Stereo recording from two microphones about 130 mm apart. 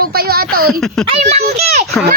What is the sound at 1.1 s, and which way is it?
Speech, 55° right (ahead or behind).